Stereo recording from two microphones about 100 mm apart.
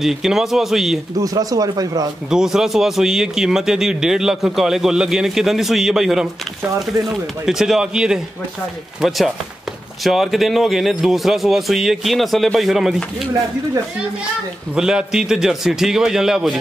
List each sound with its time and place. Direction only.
0.0 s a man's voice: 5° right (ahead or behind)
1.1 s speech: 40° right (ahead or behind)
2.2 s a man's voice: 5° right (ahead or behind)
7.4 s a man's voice: 5° right (ahead or behind)
14.8 s a man's voice: 5° right (ahead or behind)